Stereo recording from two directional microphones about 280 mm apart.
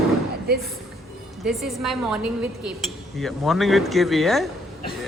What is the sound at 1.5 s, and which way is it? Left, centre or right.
Speech, centre.